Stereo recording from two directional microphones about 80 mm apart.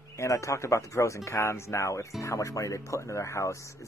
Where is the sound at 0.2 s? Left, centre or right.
Left.